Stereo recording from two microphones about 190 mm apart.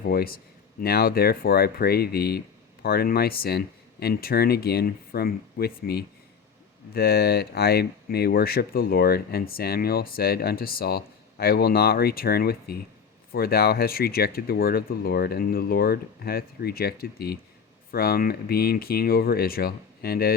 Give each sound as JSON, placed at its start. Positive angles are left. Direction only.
{"t": 0.0, "sound": "speech", "side_deg": 50}